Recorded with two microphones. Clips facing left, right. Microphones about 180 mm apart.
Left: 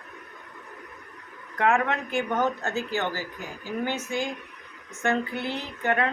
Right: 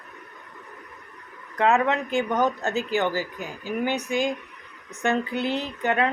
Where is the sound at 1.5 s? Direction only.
20° right (ahead or behind).